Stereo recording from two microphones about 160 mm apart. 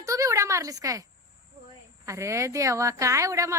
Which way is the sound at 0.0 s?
20° right (ahead or behind).